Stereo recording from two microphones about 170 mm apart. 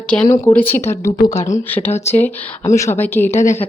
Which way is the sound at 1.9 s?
40° left (ahead or behind).